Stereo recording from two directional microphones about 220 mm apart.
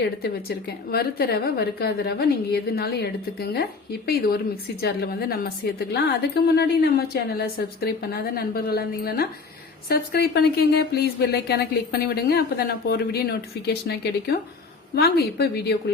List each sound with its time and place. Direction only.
0.2 s a woman's voice: 45° left (ahead or behind)